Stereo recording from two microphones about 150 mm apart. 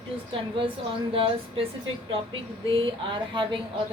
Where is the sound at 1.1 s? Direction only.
35° right (ahead or behind).